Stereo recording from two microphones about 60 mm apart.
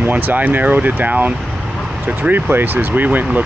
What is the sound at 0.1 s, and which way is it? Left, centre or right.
Speech, right.